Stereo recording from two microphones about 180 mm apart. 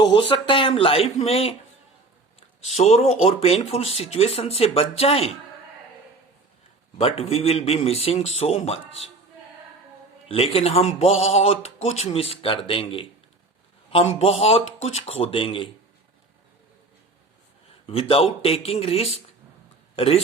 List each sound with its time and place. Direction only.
0.0 s speech: 25° left (ahead or behind)
2.6 s speech: 40° left (ahead or behind)
7.0 s speech: 35° left (ahead or behind)
10.2 s speech: 35° left (ahead or behind)
17.8 s speech: 30° left (ahead or behind)